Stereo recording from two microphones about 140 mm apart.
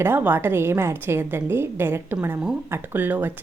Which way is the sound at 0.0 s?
15° right (ahead or behind).